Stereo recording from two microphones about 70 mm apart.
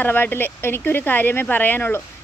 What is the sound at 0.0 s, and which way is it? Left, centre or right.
A woman's voice, left.